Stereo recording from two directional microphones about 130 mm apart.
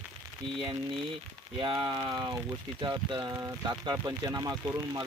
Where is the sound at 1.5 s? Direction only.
40° right (ahead or behind).